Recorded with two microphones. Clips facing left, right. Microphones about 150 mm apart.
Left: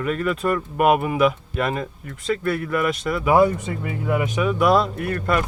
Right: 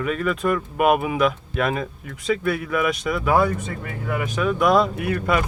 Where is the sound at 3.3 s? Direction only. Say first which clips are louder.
Left 5 dB; 20° left (ahead or behind).